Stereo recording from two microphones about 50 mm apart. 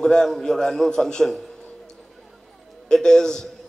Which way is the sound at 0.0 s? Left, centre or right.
Centre.